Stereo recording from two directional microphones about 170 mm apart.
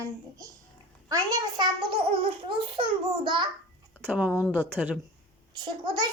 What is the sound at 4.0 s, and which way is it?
Speech, 10° right (ahead or behind).